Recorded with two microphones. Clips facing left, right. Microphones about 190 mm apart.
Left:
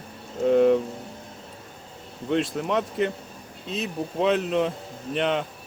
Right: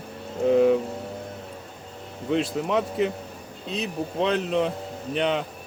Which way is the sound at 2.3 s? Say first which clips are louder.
Right 1 dB; centre (ahead or behind).